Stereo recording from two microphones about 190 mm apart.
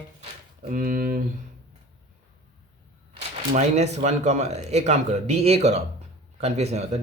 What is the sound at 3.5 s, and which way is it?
Speech, 35° right (ahead or behind).